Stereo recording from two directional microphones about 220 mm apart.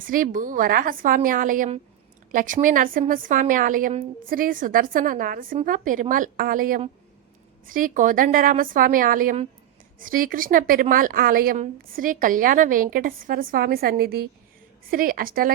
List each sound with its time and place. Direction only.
0.0 s a woman's voice: 40° right (ahead or behind)